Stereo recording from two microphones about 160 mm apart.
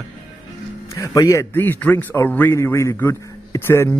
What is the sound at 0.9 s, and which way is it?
A man's voice, 20° left (ahead or behind).